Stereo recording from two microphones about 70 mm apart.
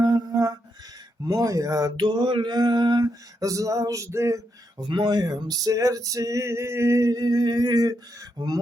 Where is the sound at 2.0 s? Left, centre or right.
Right.